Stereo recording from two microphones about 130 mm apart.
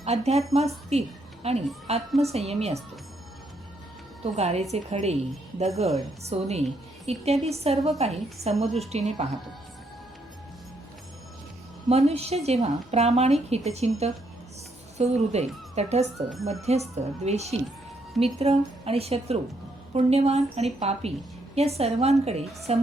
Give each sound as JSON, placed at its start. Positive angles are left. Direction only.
{"t": 0.0, "sound": "a woman's voice", "side_deg": -55}
{"t": 4.2, "sound": "a woman's voice", "side_deg": -55}
{"t": 11.9, "sound": "a woman's voice", "side_deg": -50}